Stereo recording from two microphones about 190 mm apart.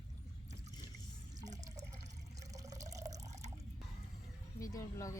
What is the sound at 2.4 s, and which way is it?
Drip, 15° right (ahead or behind).